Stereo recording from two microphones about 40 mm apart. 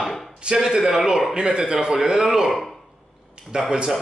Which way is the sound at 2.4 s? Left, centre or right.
Centre.